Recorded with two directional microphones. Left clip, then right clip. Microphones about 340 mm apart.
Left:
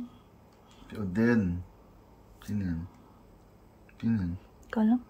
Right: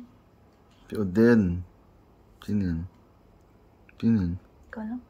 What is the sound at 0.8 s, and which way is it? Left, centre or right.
Speech, centre.